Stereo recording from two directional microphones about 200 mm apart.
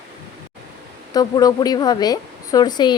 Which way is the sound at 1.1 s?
20° left (ahead or behind).